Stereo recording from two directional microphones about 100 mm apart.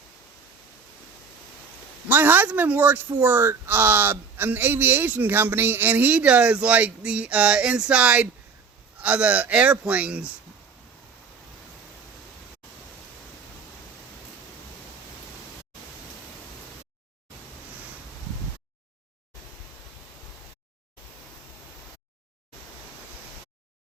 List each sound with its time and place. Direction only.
2.0 s speech: 20° right (ahead or behind)